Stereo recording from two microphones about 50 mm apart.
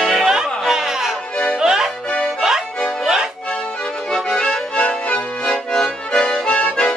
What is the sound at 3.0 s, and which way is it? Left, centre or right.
Accordion, centre.